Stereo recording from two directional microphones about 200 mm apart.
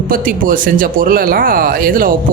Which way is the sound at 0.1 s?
45° right (ahead or behind).